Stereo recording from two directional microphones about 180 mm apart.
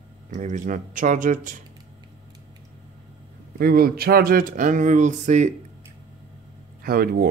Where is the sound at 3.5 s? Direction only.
55° right (ahead or behind).